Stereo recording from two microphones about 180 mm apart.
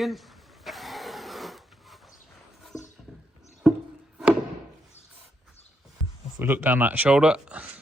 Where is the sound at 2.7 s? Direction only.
20° left (ahead or behind).